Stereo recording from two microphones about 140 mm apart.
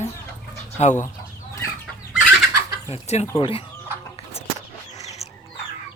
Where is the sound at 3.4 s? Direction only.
40° left (ahead or behind).